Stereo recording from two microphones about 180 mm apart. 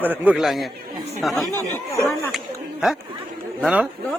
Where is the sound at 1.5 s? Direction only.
15° right (ahead or behind).